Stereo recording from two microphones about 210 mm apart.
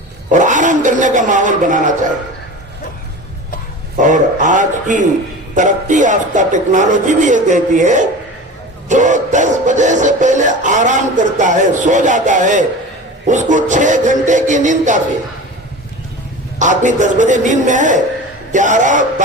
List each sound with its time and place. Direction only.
0.3 s music: 35° right (ahead or behind)
3.9 s music: 35° right (ahead or behind)
16.6 s music: 35° right (ahead or behind)